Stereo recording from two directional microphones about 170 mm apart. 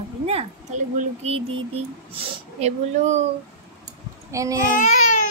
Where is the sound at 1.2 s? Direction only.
35° right (ahead or behind).